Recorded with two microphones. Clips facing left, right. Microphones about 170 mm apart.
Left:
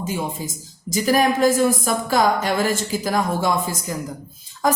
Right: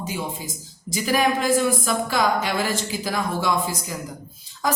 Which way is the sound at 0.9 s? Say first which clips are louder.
Left 3 dB; 45° left (ahead or behind).